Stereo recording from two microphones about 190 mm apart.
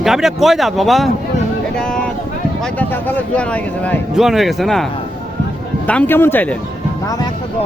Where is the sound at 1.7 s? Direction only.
5° left (ahead or behind).